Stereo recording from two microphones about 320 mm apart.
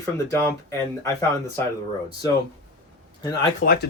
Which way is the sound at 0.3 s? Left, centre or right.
Centre.